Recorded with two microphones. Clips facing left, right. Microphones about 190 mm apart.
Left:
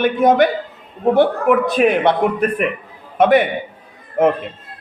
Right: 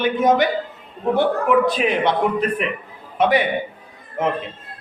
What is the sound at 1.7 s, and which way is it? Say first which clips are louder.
Speech: left 5 dB; 55° left (ahead or behind).